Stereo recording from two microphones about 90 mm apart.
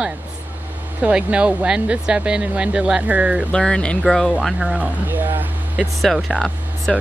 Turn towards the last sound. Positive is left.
turn(degrees=0)  # may be behind; listen again after turning